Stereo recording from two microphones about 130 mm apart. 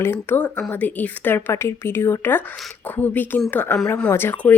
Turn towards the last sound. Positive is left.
turn(degrees=20)  # may be behind; listen again after turning